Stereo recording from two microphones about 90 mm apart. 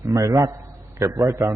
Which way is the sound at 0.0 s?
40° right (ahead or behind).